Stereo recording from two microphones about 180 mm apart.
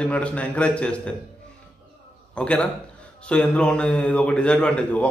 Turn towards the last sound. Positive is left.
turn(degrees=5)  # may be behind; listen again after turning